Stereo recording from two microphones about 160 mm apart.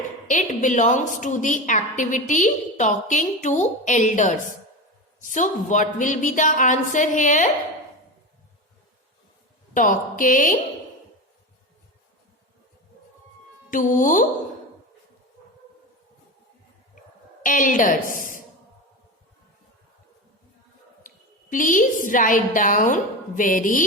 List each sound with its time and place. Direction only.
0.3 s a woman's voice: 50° left (ahead or behind)
9.7 s a woman's voice: 55° left (ahead or behind)
13.7 s a woman's voice: 55° left (ahead or behind)
17.4 s a woman's voice: 55° left (ahead or behind)
21.5 s a woman's voice: 55° left (ahead or behind)